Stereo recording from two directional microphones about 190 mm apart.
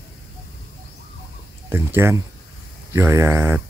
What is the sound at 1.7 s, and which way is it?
Speech, 10° right (ahead or behind).